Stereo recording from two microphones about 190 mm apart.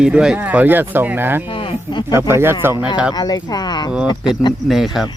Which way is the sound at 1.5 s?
25° left (ahead or behind).